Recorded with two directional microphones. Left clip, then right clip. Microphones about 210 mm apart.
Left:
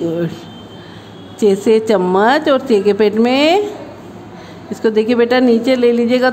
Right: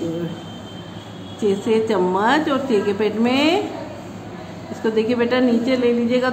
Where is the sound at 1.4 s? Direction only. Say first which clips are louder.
Left 7 dB; 45° left (ahead or behind).